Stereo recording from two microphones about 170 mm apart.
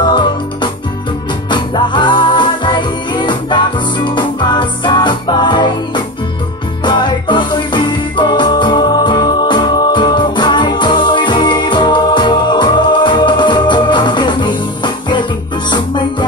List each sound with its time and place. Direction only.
0.0 s music: 25° left (ahead or behind)